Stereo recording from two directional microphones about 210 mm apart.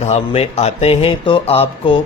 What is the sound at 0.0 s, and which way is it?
A man's voice, 30° left (ahead or behind).